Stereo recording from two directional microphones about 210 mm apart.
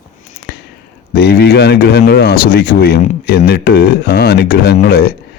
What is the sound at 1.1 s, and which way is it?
Speech, 50° left (ahead or behind).